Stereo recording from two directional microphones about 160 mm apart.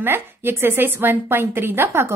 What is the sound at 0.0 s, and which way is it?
A woman's voice, 15° right (ahead or behind).